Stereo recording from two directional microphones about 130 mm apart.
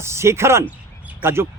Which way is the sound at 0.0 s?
20° right (ahead or behind).